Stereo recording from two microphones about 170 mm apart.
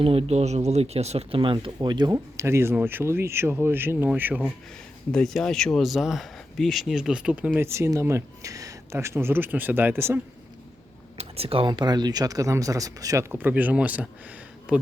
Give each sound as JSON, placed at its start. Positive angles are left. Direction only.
{"t": 0.0, "sound": "speech", "side_deg": -35}
{"t": 5.1, "sound": "speech", "side_deg": 5}
{"t": 11.2, "sound": "speech", "side_deg": -35}